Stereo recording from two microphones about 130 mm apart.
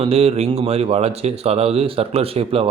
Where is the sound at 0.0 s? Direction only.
50° right (ahead or behind).